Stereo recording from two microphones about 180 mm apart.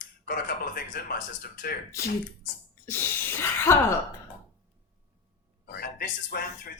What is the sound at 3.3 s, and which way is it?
Speech, 15° left (ahead or behind).